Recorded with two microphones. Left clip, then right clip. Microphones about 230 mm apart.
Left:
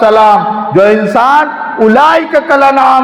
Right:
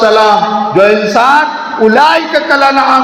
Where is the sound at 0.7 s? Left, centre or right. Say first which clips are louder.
Left 1 dB; left.